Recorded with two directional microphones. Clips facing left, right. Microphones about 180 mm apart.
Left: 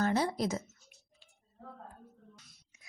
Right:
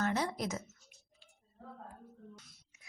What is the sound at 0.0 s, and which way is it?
Speech, 30° left (ahead or behind).